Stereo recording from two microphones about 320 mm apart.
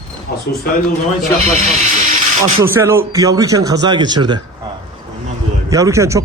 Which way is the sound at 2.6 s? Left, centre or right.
Centre.